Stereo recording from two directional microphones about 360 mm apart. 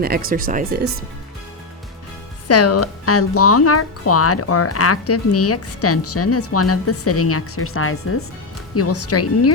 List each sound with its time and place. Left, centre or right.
0.0 s speech: right
2.5 s speech: left